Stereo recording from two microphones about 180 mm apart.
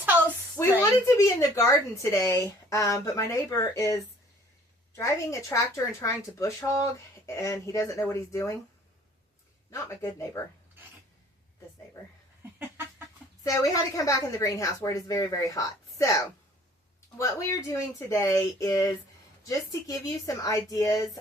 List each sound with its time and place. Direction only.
0.5 s a woman's voice: 10° left (ahead or behind)
9.6 s a woman's voice: 15° left (ahead or behind)
12.4 s a sound: 10° right (ahead or behind)
13.4 s a woman's voice: 20° left (ahead or behind)